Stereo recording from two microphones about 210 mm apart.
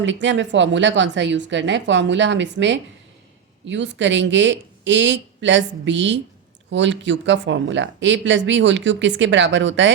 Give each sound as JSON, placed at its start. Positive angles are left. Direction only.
{"t": 0.0, "sound": "speech", "side_deg": -60}